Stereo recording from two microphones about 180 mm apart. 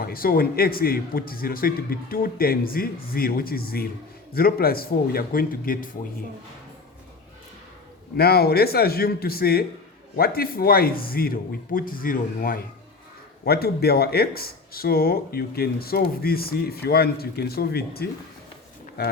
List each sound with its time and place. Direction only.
0.0 s speech: 55° left (ahead or behind)
8.1 s speech: 60° left (ahead or behind)